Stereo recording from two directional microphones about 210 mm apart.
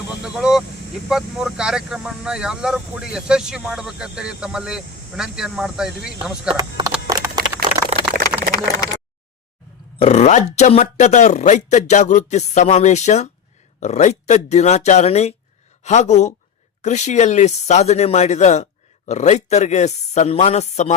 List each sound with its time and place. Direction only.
0.2 s vehicle: 5° right (ahead or behind)
1.1 s speech: 5° right (ahead or behind)
6.5 s speech: 20° right (ahead or behind)
8.4 s a sound: 15° left (ahead or behind)
10.0 s speech: 30° left (ahead or behind)